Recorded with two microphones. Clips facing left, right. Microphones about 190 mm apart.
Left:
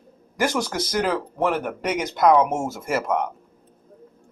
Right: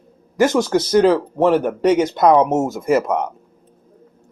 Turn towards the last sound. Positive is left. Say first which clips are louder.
# right 7 dB
turn(degrees=-20)  # may be behind; listen again after turning